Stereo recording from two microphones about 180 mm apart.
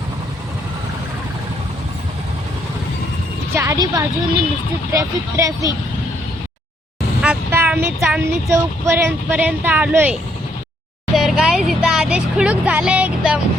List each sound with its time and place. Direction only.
3.5 s a sound: 15° right (ahead or behind)
4.9 s speech: 20° right (ahead or behind)
7.2 s vehicle: 10° right (ahead or behind)
8.4 s speech: 15° right (ahead or behind)